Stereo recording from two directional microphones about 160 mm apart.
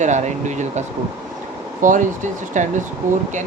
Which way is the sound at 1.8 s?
55° right (ahead or behind).